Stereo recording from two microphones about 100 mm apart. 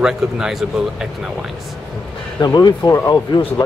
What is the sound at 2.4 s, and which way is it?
Speech, 40° left (ahead or behind).